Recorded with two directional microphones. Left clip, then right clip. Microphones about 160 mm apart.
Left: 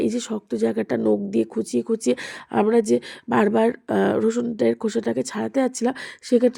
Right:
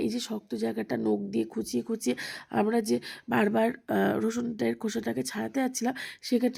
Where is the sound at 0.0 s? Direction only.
20° left (ahead or behind).